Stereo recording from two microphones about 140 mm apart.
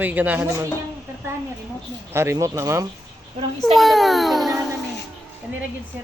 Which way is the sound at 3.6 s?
Centre (ahead or behind).